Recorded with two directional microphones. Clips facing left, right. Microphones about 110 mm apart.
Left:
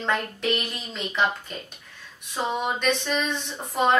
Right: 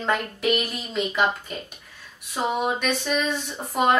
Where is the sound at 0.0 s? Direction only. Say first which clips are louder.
Right 2 dB; 5° right (ahead or behind).